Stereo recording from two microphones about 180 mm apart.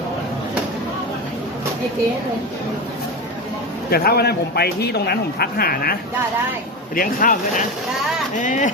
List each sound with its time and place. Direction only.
3.8 s a man's voice: 60° left (ahead or behind); by 8.7 s 45° left (ahead or behind)